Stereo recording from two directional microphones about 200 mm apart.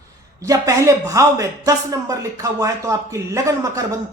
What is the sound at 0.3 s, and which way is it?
Speech, 15° right (ahead or behind).